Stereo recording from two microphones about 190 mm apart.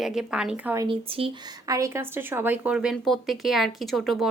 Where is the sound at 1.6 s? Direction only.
15° right (ahead or behind); by 4.3 s centre (ahead or behind).